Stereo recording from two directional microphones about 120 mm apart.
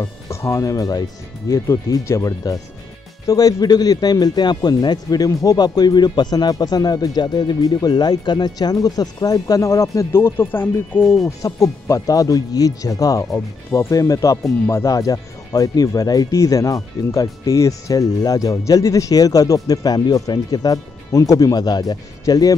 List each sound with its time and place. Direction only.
0.0 s speech: 20° left (ahead or behind)